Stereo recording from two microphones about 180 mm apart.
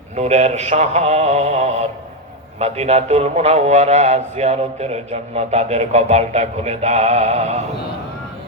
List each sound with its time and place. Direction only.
0.2 s a man's voice: 40° right (ahead or behind)